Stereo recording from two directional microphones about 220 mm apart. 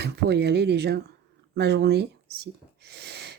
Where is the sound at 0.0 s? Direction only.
50° right (ahead or behind).